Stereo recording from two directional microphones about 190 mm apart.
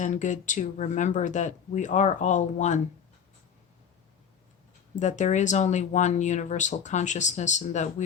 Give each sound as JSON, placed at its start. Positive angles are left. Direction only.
{"t": 0.0, "sound": "speech", "side_deg": 40}
{"t": 4.9, "sound": "speech", "side_deg": 40}